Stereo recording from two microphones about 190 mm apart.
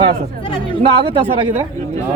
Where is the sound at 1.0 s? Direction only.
30° right (ahead or behind).